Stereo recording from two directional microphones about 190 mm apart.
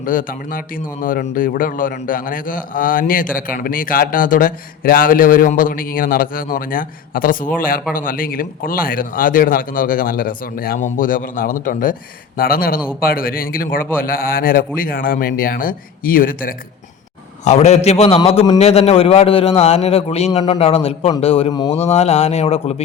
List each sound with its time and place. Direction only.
0.0 s a man's voice: 45° left (ahead or behind)
17.4 s a man's voice: 35° left (ahead or behind)
21.5 s speech: 20° left (ahead or behind)
21.8 s a man's voice: 35° left (ahead or behind)